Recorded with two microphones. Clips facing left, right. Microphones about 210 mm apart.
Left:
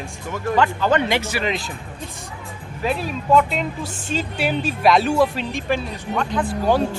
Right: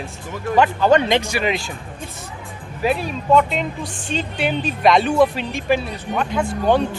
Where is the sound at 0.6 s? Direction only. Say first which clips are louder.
Right 4 dB; 20° right (ahead or behind).